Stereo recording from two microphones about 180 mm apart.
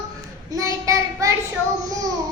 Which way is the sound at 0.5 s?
20° right (ahead or behind).